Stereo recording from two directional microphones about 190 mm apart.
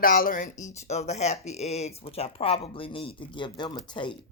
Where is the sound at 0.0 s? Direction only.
45° left (ahead or behind).